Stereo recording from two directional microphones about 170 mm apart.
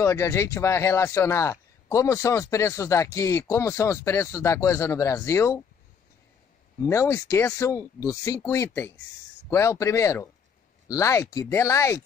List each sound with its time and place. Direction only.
0.0 s speech: 15° left (ahead or behind)
6.8 s speech: 15° left (ahead or behind)